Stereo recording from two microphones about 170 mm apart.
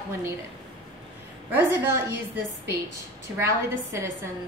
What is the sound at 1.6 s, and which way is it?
Speech, 15° right (ahead or behind).